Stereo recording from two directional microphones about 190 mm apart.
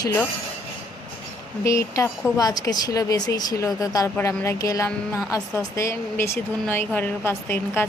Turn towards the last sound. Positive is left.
turn(degrees=10)  # may be behind; listen again after turning